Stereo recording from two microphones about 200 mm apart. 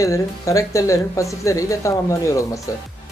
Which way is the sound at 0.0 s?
15° left (ahead or behind).